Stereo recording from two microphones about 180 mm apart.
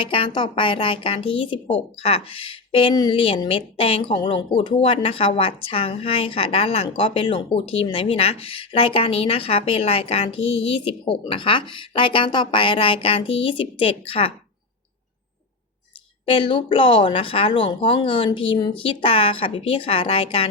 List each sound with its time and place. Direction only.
0.0 s a woman's voice: 30° left (ahead or behind)
16.2 s speech: 30° left (ahead or behind)